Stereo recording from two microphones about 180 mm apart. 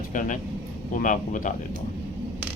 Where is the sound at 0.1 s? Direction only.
45° left (ahead or behind).